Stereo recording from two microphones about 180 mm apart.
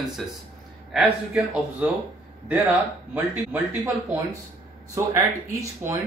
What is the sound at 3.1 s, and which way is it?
Speech, 10° right (ahead or behind).